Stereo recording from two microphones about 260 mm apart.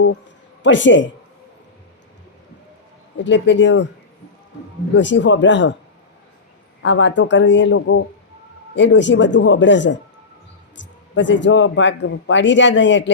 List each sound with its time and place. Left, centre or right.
0.6 s speech: left
3.2 s speech: left
4.9 s speech: left
6.8 s speech: left